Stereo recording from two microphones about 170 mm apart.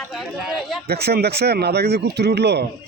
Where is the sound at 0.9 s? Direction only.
70° right (ahead or behind).